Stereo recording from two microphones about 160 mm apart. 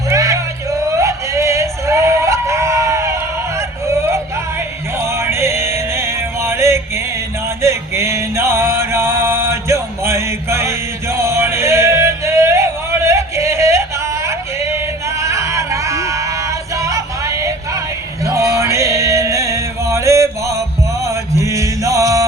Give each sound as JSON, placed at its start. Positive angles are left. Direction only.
{"t": 0.1, "sound": "a sound", "side_deg": -20}
{"t": 4.9, "sound": "male singing", "side_deg": -15}
{"t": 15.2, "sound": "music", "side_deg": -20}
{"t": 18.3, "sound": "male singing", "side_deg": -20}